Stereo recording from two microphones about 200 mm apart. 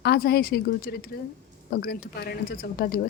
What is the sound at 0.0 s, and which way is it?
A woman's voice, 55° left (ahead or behind).